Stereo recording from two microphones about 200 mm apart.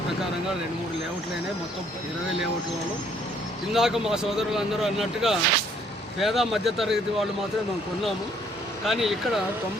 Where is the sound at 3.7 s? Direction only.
Centre (ahead or behind).